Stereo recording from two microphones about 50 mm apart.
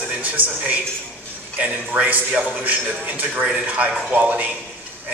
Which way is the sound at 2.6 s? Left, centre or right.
Right.